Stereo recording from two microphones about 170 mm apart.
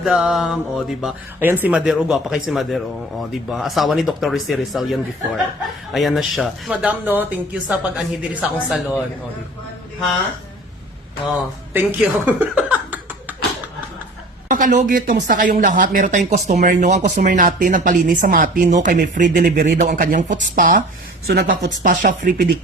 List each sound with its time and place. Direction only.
0.0 s speech: 5° right (ahead or behind)
11.7 s chuckle: 10° right (ahead or behind)
14.4 s a sound: 50° right (ahead or behind)
14.7 s speech: 65° right (ahead or behind)